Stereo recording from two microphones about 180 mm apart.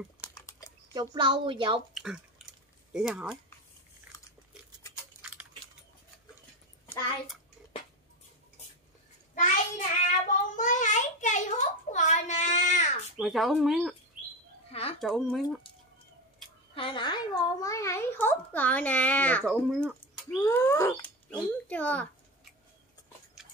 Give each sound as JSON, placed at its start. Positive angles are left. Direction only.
{"t": 0.2, "sound": "typing", "side_deg": 20}
{"t": 0.9, "sound": "a woman's voice", "side_deg": -25}
{"t": 2.9, "sound": "speech", "side_deg": -5}
{"t": 5.2, "sound": "coin", "side_deg": -10}
{"t": 9.3, "sound": "child singing", "side_deg": 45}
{"t": 13.2, "sound": "speech", "side_deg": 0}
{"t": 14.7, "sound": "speech", "side_deg": 35}
{"t": 15.0, "sound": "speech", "side_deg": 0}
{"t": 16.7, "sound": "a woman's voice", "side_deg": 25}